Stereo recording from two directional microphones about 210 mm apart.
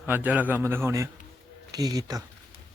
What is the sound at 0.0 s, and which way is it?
A man's voice, 10° right (ahead or behind).